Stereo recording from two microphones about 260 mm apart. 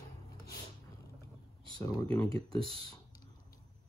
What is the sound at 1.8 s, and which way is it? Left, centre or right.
Speech, centre.